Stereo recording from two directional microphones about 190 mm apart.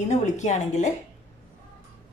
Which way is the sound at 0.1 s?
35° left (ahead or behind).